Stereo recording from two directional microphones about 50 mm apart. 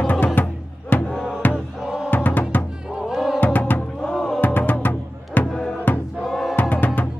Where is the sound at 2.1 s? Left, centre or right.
Left.